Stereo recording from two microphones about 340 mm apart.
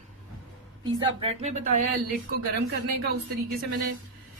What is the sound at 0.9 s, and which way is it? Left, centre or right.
Speech, centre.